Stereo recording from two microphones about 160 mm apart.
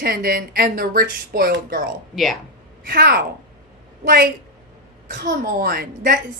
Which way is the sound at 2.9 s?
70° right (ahead or behind).